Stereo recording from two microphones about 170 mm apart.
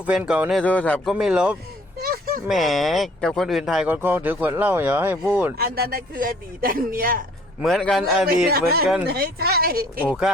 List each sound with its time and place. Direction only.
0.0 s a man's voice: 5° right (ahead or behind)
0.6 s a man's voice: 10° left (ahead or behind)
1.1 s speech: 5° right (ahead or behind)
2.0 s a sound: 60° right (ahead or behind)
2.5 s speech: centre (ahead or behind)
5.5 s a man's voice: 65° right (ahead or behind)
7.6 s a man's voice: centre (ahead or behind)
9.0 s a man's voice: 65° right (ahead or behind)
10.1 s a man's voice: 5° right (ahead or behind)